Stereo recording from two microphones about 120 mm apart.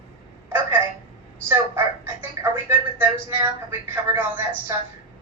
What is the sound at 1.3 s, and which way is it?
A woman's voice, 20° right (ahead or behind).